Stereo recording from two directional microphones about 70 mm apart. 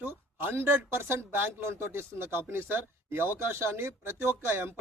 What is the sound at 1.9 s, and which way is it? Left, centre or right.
A man's voice, right.